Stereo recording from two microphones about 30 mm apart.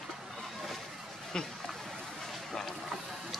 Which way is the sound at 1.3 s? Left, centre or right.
Left.